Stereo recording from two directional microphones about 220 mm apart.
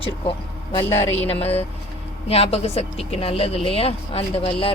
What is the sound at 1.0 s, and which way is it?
Music, 10° left (ahead or behind).